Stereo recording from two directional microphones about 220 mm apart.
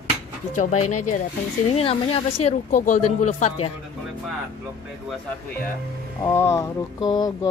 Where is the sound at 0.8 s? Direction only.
90° left.